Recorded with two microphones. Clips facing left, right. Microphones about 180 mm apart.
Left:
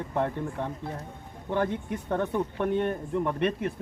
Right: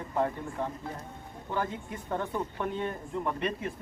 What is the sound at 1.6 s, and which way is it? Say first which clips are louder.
Speech: left 5 dB; 65° left (ahead or behind).